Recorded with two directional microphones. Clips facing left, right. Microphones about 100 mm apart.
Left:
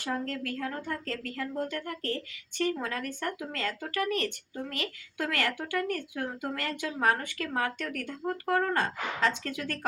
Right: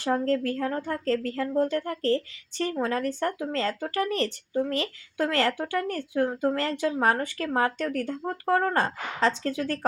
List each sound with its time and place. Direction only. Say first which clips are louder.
0.0 s speech: right 8 dB; 35° right (ahead or behind)